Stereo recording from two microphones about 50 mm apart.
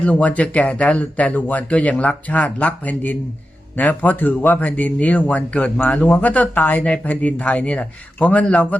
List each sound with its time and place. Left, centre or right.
0.0 s speech: left